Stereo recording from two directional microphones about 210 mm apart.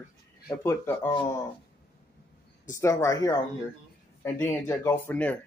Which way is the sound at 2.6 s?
15° left (ahead or behind).